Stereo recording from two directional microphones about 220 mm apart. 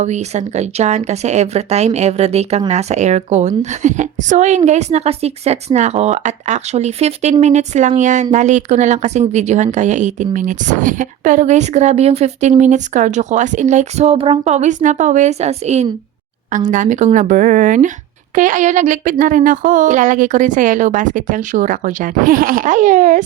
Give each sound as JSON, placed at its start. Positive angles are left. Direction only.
{"t": 0.0, "sound": "speech", "side_deg": -30}